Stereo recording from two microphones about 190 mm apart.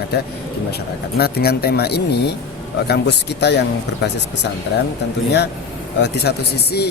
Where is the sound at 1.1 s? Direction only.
55° left (ahead or behind).